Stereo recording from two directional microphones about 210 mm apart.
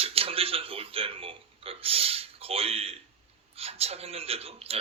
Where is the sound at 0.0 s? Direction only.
25° right (ahead or behind).